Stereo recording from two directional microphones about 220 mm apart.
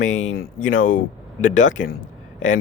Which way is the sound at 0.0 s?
60° left (ahead or behind).